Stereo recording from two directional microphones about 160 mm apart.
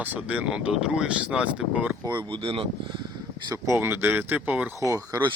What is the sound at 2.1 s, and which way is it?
Speech, 30° right (ahead or behind).